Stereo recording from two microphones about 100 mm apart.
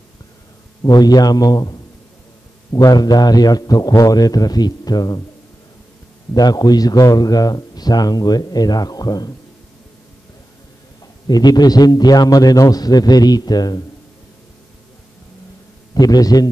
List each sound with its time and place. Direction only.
0.8 s a man's voice: 40° left (ahead or behind)
6.3 s a man's voice: 40° left (ahead or behind)
11.2 s a man's voice: 45° left (ahead or behind)
15.9 s a man's voice: 40° left (ahead or behind)